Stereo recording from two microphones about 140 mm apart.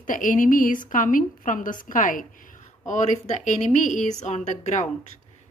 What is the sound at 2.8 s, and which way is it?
Speech, 60° left (ahead or behind).